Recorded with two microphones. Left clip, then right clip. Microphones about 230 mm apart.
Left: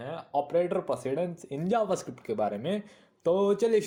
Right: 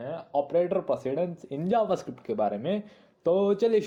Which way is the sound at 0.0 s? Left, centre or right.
Left.